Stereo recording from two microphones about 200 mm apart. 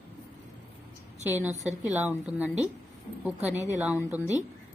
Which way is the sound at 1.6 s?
5° right (ahead or behind).